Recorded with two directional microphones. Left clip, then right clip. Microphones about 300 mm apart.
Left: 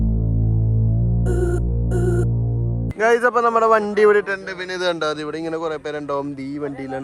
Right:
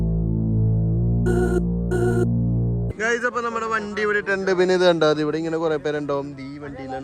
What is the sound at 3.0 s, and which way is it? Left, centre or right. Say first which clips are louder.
Speech: left 7 dB; centre.